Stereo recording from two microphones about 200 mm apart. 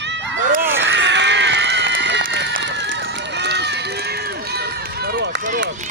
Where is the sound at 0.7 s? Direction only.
60° right (ahead or behind).